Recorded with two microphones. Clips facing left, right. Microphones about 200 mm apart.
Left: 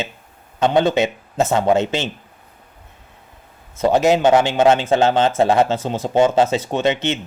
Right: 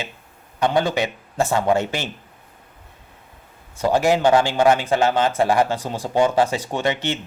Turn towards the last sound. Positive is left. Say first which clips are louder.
# left 4 dB
turn(degrees=20)  # may be behind; listen again after turning